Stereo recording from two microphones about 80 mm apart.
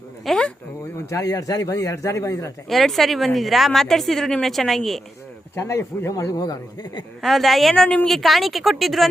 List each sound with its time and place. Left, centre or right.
0.3 s speech: centre
1.1 s speech: left
2.6 s speech: centre
5.5 s speech: left
7.2 s speech: centre
8.0 s speech: centre